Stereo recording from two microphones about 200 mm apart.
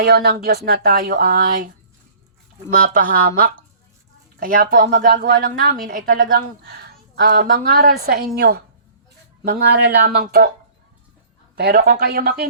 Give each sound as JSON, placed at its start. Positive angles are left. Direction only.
{"t": 0.0, "sound": "speech", "side_deg": -50}
{"t": 2.8, "sound": "a woman's voice", "side_deg": -45}
{"t": 11.5, "sound": "speech", "side_deg": -50}